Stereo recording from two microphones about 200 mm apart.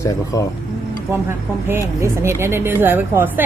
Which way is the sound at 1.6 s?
15° right (ahead or behind).